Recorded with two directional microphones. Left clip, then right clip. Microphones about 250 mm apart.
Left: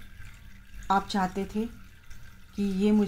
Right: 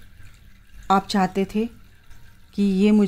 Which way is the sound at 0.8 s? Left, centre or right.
Right.